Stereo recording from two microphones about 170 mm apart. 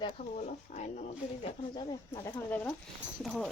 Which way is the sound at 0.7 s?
40° left (ahead or behind).